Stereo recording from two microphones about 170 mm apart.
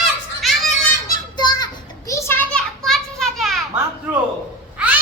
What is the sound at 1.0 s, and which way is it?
Children playing, 25° left (ahead or behind).